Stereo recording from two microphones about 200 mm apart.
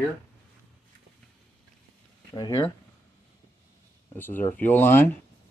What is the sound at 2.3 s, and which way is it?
Speech, 20° left (ahead or behind).